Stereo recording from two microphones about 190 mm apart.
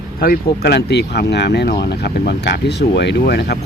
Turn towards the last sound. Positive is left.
turn(degrees=60)  # may be behind; listen again after turning